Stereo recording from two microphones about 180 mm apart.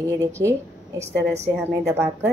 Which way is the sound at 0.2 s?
15° right (ahead or behind).